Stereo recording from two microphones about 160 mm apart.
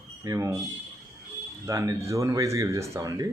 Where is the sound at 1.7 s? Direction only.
20° right (ahead or behind).